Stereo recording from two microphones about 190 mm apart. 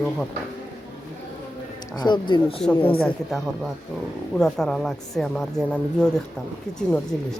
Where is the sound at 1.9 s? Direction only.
25° left (ahead or behind).